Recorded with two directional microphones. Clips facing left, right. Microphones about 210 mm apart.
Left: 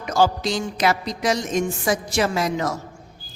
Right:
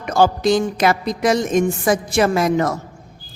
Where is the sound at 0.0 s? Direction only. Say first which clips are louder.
Right 4 dB; 55° right (ahead or behind).